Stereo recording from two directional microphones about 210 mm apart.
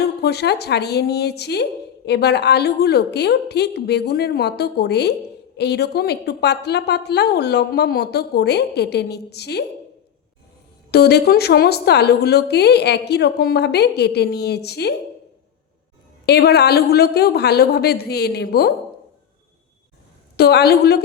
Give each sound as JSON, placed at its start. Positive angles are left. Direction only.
{"t": 0.0, "sound": "a woman's voice", "side_deg": 50}
{"t": 10.9, "sound": "a woman's voice", "side_deg": 50}
{"t": 16.2, "sound": "a woman's voice", "side_deg": 50}
{"t": 20.3, "sound": "a woman's voice", "side_deg": 50}